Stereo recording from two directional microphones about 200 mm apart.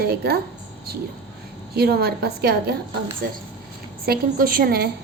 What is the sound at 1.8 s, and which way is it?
Speech, 50° right (ahead or behind).